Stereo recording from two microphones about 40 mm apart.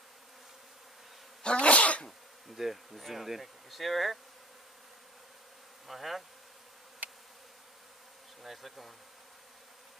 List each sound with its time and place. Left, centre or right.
1.4 s sneeze: left
2.0 s bee: centre
5.9 s bee: centre
8.4 s bee: centre